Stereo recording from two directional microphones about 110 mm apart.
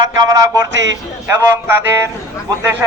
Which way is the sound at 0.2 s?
30° right (ahead or behind).